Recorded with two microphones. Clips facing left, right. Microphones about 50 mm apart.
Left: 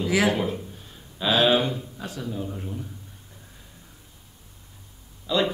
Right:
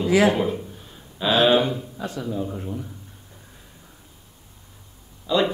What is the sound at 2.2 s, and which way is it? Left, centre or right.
Speech, centre.